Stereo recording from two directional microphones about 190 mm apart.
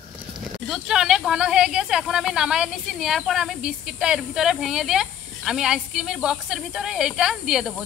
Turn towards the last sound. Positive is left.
turn(degrees=0)  # may be behind; listen again after turning